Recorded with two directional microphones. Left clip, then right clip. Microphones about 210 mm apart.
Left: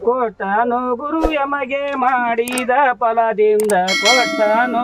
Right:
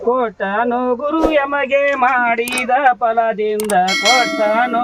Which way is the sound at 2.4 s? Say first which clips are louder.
Even; 10° left (ahead or behind).